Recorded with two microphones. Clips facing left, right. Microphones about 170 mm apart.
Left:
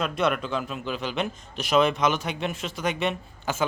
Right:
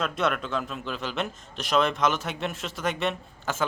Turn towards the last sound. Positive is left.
turn(degrees=0)  # may be behind; listen again after turning